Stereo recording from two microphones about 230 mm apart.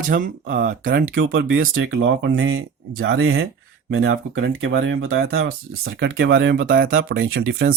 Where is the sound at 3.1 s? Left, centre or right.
Right.